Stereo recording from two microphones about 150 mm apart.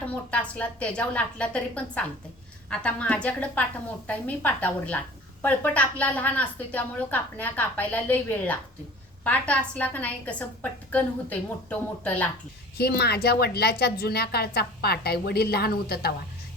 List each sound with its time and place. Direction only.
0.0 s a woman's voice: 10° left (ahead or behind)
12.7 s a woman's voice: 90° left